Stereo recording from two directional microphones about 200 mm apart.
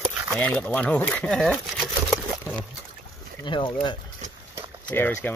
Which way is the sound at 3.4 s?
25° left (ahead or behind).